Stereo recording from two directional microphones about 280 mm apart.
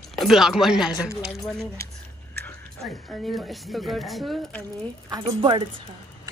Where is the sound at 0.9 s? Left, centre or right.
Centre.